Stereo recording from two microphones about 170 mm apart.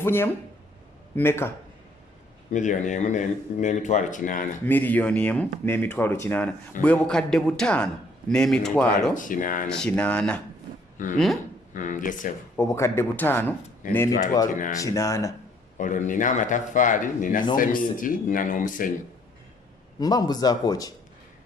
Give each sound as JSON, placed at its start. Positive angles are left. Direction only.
{"t": 0.0, "sound": "speech", "side_deg": 15}
{"t": 2.5, "sound": "speech", "side_deg": 45}
{"t": 4.6, "sound": "a man's voice", "side_deg": 10}
{"t": 9.1, "sound": "speech", "side_deg": 50}
{"t": 9.6, "sound": "a man's voice", "side_deg": 5}
{"t": 10.9, "sound": "speech", "side_deg": 50}
{"t": 12.5, "sound": "speech", "side_deg": 15}
{"t": 14.4, "sound": "speech", "side_deg": 50}
{"t": 14.8, "sound": "a man's voice", "side_deg": 20}
{"t": 15.8, "sound": "speech", "side_deg": 50}
{"t": 20.0, "sound": "a man's voice", "side_deg": 20}